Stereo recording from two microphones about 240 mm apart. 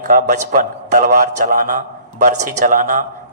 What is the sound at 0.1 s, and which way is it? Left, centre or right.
Speech, right.